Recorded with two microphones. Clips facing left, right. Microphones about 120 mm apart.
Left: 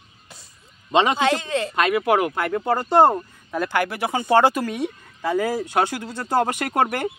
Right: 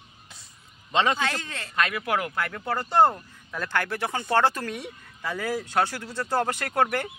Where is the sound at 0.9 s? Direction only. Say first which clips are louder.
Left 6 dB; 20° left (ahead or behind).